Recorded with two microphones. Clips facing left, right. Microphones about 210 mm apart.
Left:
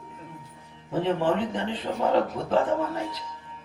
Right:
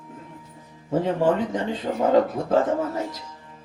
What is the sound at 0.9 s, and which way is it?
Speech, 45° right (ahead or behind).